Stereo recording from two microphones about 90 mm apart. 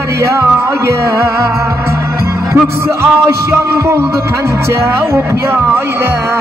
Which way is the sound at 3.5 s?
30° right (ahead or behind).